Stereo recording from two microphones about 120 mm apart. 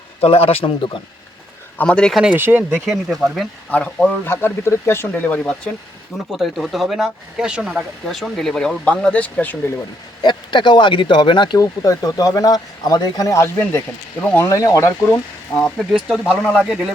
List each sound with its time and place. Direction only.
0.2 s a man's voice: 55° left (ahead or behind)
1.8 s speech: 10° left (ahead or behind)
2.2 s speech: 15° right (ahead or behind)
2.9 s speech: 5° right (ahead or behind)
3.7 s speech: 10° left (ahead or behind)
10.2 s speech: 40° left (ahead or behind); by 14.5 s 15° left (ahead or behind)
14.5 s speech: 30° left (ahead or behind)
15.5 s speech: 5° left (ahead or behind)